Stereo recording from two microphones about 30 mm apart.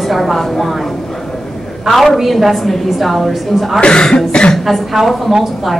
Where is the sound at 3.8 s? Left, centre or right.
Left.